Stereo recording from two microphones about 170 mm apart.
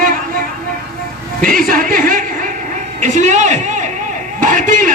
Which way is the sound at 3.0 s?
45° right (ahead or behind).